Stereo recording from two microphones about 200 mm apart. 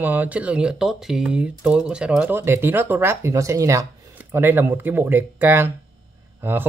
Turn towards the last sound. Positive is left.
turn(degrees=-10)  # may be behind; listen again after turning